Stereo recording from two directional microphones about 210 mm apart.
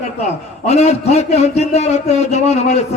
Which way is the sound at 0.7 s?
30° left (ahead or behind).